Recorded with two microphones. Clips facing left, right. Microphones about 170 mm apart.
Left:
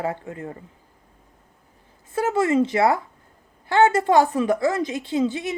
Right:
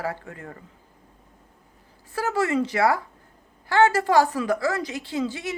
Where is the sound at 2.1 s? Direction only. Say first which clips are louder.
Left 4 dB; 25° left (ahead or behind).